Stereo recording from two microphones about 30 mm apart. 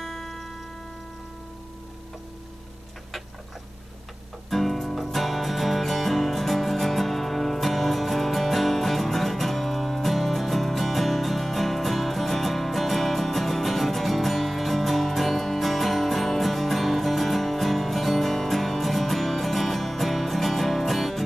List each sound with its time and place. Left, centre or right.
0.0 s music: centre
4.5 s music: centre